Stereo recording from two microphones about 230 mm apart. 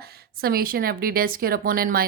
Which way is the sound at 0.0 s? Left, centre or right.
Right.